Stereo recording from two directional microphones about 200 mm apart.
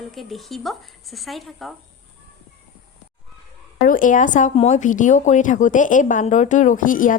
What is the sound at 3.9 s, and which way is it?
Speech, 40° left (ahead or behind).